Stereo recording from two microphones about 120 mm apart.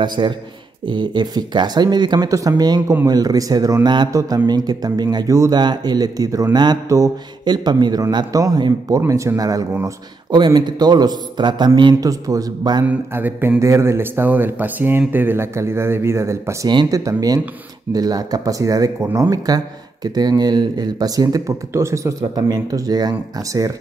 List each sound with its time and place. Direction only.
0.0 s speech: 40° right (ahead or behind)
12.8 s speech: 15° right (ahead or behind)
16.6 s speech: 35° right (ahead or behind)